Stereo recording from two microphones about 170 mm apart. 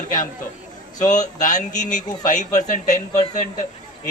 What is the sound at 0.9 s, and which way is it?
Speech, 45° left (ahead or behind).